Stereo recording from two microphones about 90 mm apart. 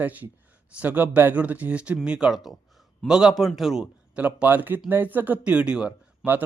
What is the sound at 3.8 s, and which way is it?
A man's voice, 15° right (ahead or behind).